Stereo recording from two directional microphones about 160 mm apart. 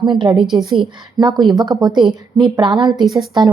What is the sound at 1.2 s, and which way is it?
A woman's voice, 25° right (ahead or behind).